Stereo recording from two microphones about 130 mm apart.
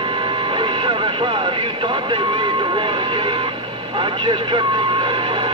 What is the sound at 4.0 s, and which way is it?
Vehicle, 40° right (ahead or behind).